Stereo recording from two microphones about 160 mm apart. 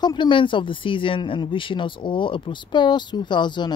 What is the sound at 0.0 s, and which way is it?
Speech, 30° left (ahead or behind).